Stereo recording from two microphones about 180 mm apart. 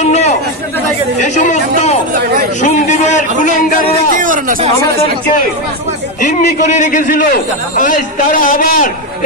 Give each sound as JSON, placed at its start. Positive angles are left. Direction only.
{"t": 0.0, "sound": "chatter", "side_deg": 40}
{"t": 1.2, "sound": "a man's voice", "side_deg": 40}
{"t": 4.2, "sound": "speech", "side_deg": -45}
{"t": 6.2, "sound": "a man's voice", "side_deg": 40}